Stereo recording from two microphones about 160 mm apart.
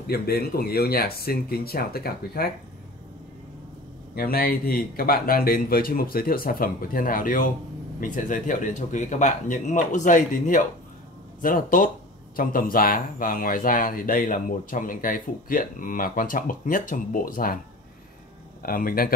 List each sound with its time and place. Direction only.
0.0 s speech: 75° left (ahead or behind)
4.1 s speech: 70° left (ahead or behind)
18.6 s speech: 65° left (ahead or behind)